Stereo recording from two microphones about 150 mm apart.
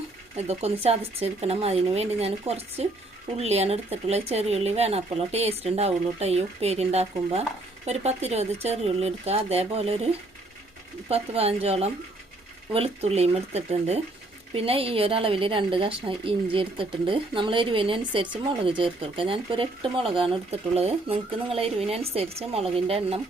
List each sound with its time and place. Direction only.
0.3 s speech: 45° right (ahead or behind)
11.1 s speech: 40° right (ahead or behind)